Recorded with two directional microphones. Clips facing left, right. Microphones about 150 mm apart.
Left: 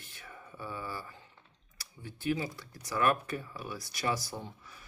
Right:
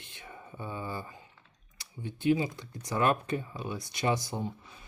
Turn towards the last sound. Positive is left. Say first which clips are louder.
# right 7 dB
turn(degrees=-20)  # may be behind; listen again after turning